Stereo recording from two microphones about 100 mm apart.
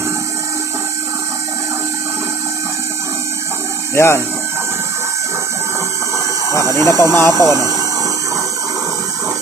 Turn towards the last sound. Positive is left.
turn(degrees=-35)  # may be behind; listen again after turning